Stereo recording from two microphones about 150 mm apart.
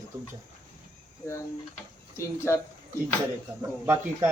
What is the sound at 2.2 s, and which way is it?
Speech, 15° left (ahead or behind).